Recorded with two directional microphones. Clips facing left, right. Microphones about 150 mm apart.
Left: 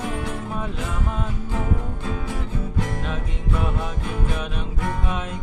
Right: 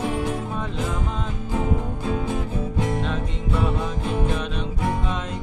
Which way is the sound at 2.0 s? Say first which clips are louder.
Right 5 dB; 20° right (ahead or behind).